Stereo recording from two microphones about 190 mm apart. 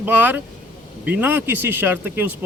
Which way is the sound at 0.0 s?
10° right (ahead or behind).